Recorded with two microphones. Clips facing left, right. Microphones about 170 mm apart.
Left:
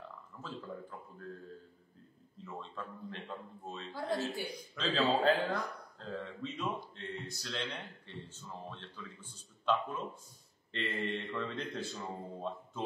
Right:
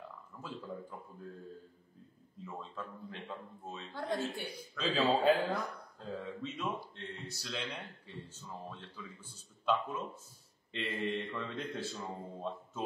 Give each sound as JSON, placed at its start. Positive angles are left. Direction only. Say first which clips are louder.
{"t": 0.4, "sound": "a man's voice", "louder": "even", "side_deg": -10}
{"t": 2.4, "sound": "a man's voice", "louder": "even", "side_deg": -5}